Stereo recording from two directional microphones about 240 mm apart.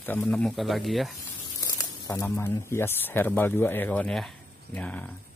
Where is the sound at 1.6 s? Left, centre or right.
Centre.